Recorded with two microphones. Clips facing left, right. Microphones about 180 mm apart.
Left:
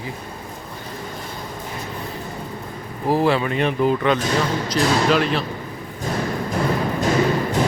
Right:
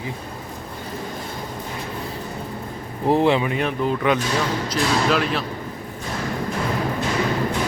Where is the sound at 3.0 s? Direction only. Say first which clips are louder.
Right 1 dB; 25° right (ahead or behind).